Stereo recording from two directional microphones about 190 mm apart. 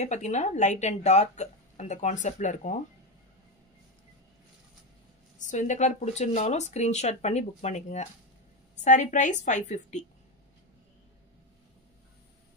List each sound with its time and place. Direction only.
0.0 s speech: 40° left (ahead or behind)
5.4 s speech: 40° left (ahead or behind)